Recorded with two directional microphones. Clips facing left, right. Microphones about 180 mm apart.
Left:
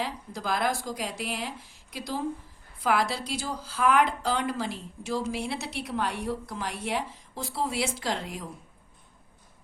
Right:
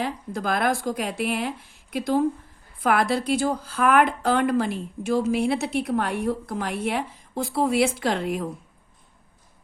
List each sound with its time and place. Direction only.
0.0 s a woman's voice: 55° right (ahead or behind)